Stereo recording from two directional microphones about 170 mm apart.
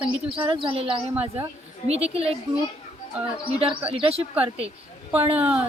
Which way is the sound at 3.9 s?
30° right (ahead or behind).